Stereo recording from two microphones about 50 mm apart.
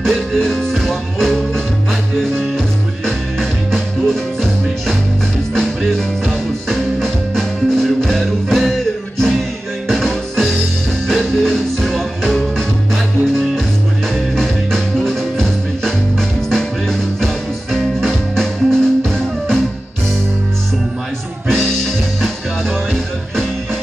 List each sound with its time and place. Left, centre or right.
0.0 s music: centre
3.1 s music: centre
21.5 s music: centre